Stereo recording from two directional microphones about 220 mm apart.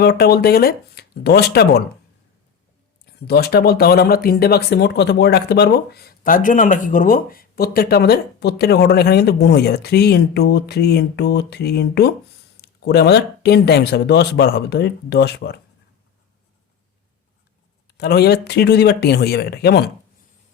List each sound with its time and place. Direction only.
0.0 s speech: 45° left (ahead or behind)
3.0 s speech: 45° left (ahead or behind)
17.8 s speech: 45° left (ahead or behind)